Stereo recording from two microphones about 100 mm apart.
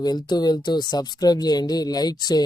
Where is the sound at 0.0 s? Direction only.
45° left (ahead or behind).